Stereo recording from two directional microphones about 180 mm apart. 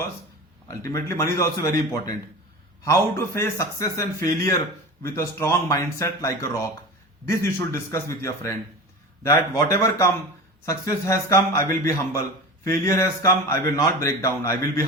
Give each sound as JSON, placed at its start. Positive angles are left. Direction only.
{"t": 0.7, "sound": "a man's voice", "side_deg": 15}